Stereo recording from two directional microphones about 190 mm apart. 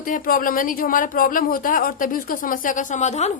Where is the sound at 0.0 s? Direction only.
45° left (ahead or behind).